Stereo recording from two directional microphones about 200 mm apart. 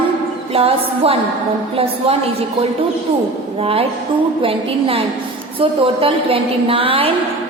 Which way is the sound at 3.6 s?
30° right (ahead or behind).